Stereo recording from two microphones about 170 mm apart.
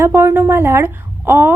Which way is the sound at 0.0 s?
15° right (ahead or behind).